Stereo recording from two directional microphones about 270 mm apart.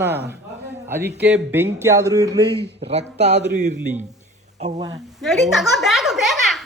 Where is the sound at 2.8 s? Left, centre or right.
Right.